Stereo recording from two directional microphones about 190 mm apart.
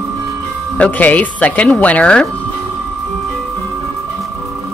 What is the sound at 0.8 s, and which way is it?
Speech, 10° left (ahead or behind).